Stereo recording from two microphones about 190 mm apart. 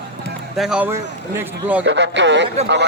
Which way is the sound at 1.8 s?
70° right (ahead or behind).